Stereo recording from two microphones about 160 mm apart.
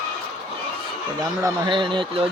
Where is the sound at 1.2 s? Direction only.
25° right (ahead or behind).